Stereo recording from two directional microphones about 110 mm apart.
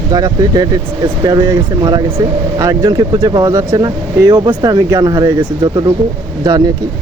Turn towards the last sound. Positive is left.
turn(degrees=-35)  # may be behind; listen again after turning